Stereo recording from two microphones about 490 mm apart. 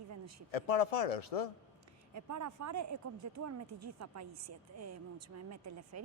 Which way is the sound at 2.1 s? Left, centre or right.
Right.